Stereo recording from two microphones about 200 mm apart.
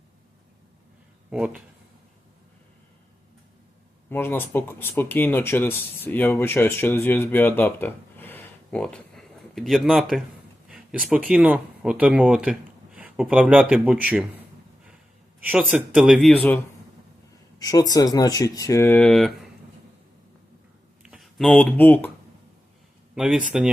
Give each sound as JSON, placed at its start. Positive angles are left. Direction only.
{"t": 1.3, "sound": "speech", "side_deg": -5}
{"t": 4.1, "sound": "speech", "side_deg": 10}
{"t": 15.4, "sound": "speech", "side_deg": -10}
{"t": 17.6, "sound": "speech", "side_deg": 20}
{"t": 21.0, "sound": "speech", "side_deg": 0}
{"t": 23.1, "sound": "speech", "side_deg": -5}